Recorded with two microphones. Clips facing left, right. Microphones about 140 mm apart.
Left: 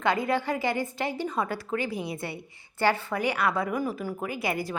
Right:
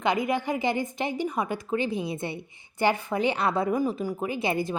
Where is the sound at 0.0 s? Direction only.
15° right (ahead or behind).